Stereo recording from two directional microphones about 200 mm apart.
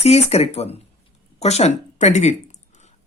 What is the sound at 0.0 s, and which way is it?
Speech, 30° left (ahead or behind).